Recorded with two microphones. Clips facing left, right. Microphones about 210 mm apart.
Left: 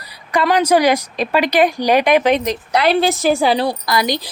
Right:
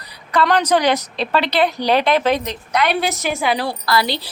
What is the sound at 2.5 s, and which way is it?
A woman's voice, 35° left (ahead or behind).